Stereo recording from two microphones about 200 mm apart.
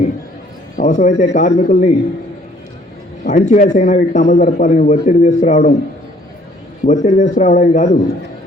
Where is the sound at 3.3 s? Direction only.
40° left (ahead or behind).